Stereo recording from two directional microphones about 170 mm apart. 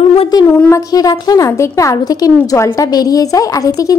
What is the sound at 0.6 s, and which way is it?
A woman's voice, 15° left (ahead or behind).